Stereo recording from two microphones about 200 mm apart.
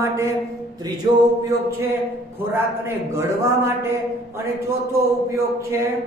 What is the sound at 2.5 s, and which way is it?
A man's voice, 10° right (ahead or behind).